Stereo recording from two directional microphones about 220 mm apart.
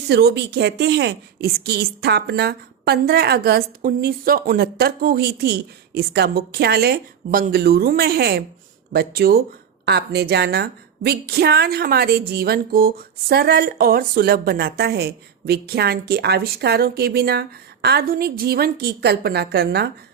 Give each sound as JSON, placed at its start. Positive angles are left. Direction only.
{"t": 0.1, "sound": "a woman's voice", "side_deg": -50}